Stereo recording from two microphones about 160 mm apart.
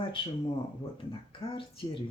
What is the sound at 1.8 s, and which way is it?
Speech, 30° left (ahead or behind).